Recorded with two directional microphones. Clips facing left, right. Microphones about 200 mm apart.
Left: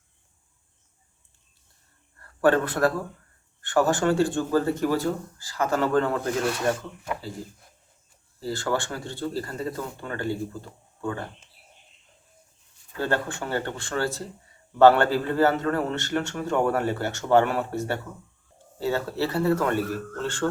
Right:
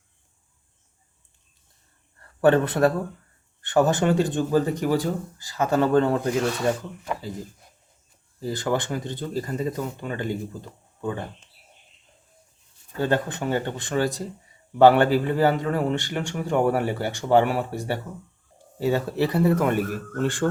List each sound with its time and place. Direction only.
2.1 s a sound: 20° right (ahead or behind)
3.6 s speech: 20° right (ahead or behind)
6.4 s speech: centre (ahead or behind)
8.4 s speech: 20° right (ahead or behind)
13.0 s speech: 15° right (ahead or behind)